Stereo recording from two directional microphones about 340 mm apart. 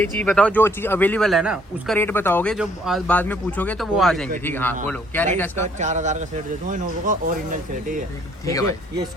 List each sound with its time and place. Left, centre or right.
0.0 s speech: centre
5.8 s speech: right